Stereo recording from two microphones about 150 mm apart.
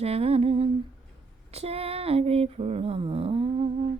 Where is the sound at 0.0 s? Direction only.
40° right (ahead or behind).